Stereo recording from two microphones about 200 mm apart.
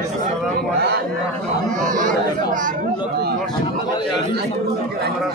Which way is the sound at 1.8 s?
40° right (ahead or behind).